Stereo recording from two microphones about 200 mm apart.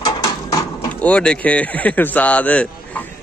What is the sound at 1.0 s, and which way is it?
A man's voice, 5° left (ahead or behind).